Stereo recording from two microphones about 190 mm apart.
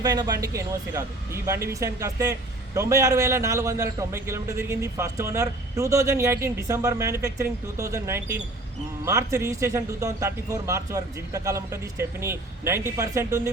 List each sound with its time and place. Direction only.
0.0 s a man's voice: 20° right (ahead or behind)